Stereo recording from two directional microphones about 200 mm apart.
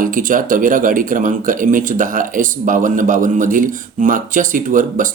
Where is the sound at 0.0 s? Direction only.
40° right (ahead or behind).